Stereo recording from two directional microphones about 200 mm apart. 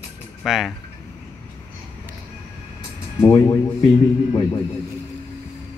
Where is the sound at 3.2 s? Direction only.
15° left (ahead or behind).